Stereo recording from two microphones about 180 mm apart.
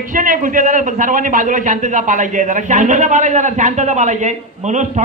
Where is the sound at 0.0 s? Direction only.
50° right (ahead or behind).